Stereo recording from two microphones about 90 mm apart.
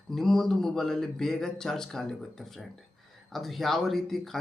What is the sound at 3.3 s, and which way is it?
Speech, centre (ahead or behind).